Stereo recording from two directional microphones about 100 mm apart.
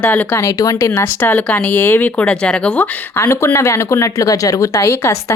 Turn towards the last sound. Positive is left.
turn(degrees=30)  # may be behind; listen again after turning